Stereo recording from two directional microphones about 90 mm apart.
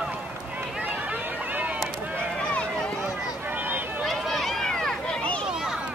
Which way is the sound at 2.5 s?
15° left (ahead or behind).